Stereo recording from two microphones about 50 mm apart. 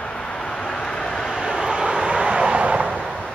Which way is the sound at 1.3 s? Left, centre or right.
Centre.